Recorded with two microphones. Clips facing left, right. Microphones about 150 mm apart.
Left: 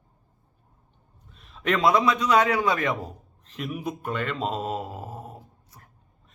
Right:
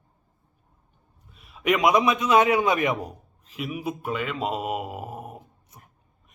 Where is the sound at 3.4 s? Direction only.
10° right (ahead or behind).